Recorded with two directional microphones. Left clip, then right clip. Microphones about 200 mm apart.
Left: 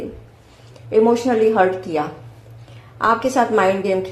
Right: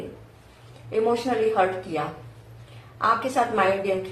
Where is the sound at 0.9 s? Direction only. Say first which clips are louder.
Left 8 dB; 50° left (ahead or behind).